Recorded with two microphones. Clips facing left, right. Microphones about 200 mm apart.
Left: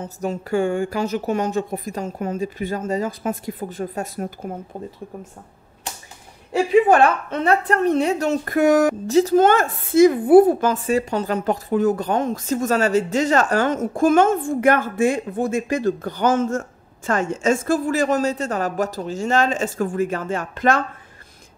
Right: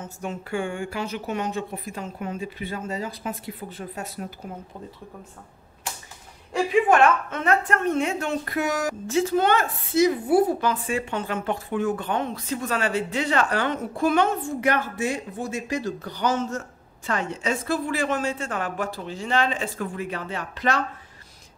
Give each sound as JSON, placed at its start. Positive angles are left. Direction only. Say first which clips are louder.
{"t": 0.0, "sound": "speech", "louder": "left 6 dB", "side_deg": 40}
{"t": 6.7, "sound": "a woman's voice", "louder": "left 4 dB", "side_deg": 35}
{"t": 9.0, "sound": "speech", "louder": "left 7 dB", "side_deg": 40}